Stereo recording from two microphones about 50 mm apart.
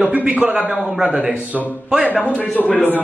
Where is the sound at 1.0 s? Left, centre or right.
Right.